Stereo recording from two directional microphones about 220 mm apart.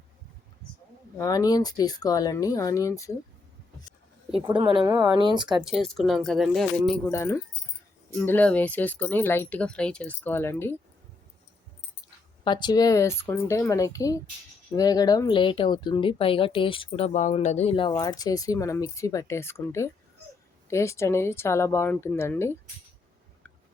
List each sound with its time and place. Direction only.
1.2 s speech: 15° left (ahead or behind)
4.3 s speech: 25° right (ahead or behind)
5.6 s speech: centre (ahead or behind)
12.5 s speech: 20° left (ahead or behind)